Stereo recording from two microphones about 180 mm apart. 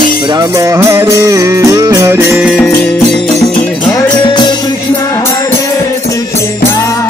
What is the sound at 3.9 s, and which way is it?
Music, 25° left (ahead or behind).